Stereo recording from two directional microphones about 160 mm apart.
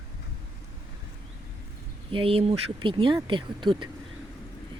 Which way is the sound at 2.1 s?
35° right (ahead or behind).